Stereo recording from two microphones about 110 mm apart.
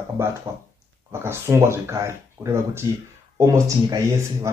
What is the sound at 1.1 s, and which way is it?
A man's voice, 20° right (ahead or behind).